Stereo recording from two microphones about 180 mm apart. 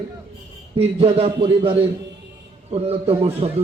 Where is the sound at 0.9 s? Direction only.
35° right (ahead or behind).